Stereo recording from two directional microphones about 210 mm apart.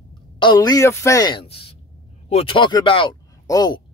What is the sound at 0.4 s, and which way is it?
A woman's voice, 20° left (ahead or behind).